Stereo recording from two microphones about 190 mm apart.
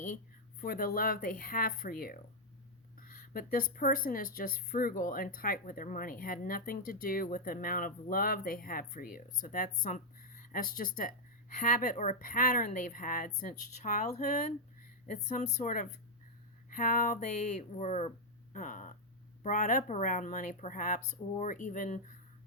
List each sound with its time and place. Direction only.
0.6 s speech: 55° left (ahead or behind)